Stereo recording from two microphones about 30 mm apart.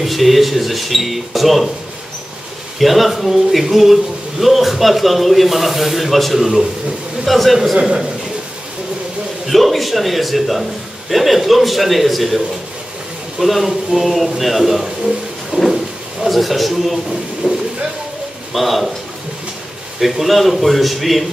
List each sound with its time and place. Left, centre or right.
0.0 s a man's voice: centre
2.8 s a man's voice: centre
9.5 s a man's voice: centre
13.4 s a man's voice: centre
14.4 s a sound: centre
16.3 s a man's voice: centre
17.4 s a sound: right
18.5 s a man's voice: centre
20.0 s a man's voice: centre